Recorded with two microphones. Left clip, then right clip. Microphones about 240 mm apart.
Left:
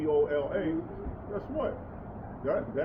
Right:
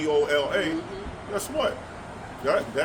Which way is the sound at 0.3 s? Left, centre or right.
Right.